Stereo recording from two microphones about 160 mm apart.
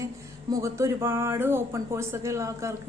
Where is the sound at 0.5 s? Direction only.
20° right (ahead or behind).